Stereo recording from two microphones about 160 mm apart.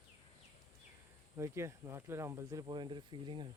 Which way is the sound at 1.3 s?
15° right (ahead or behind).